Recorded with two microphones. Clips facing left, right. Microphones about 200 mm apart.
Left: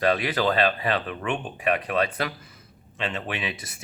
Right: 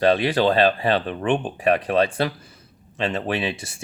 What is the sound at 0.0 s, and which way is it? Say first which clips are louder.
Speech: right 5 dB; 30° right (ahead or behind).